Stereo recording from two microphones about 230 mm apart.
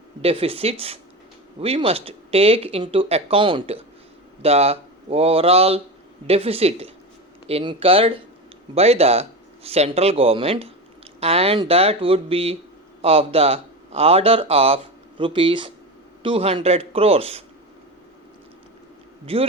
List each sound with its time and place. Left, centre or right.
0.2 s speech: right
19.2 s speech: right